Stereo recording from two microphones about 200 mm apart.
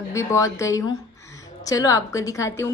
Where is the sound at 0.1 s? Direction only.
15° left (ahead or behind).